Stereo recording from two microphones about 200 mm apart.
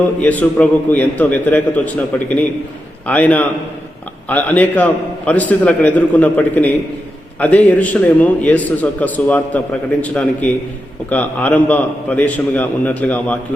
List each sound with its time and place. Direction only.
0.2 s a man's voice: 10° left (ahead or behind)